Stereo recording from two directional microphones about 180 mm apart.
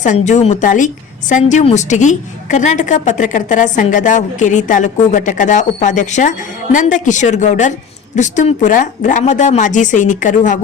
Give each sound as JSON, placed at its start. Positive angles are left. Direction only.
{"t": 0.0, "sound": "a woman's voice", "side_deg": 40}